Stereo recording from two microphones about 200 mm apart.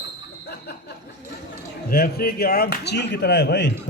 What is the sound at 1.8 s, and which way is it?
A man's voice, 50° left (ahead or behind).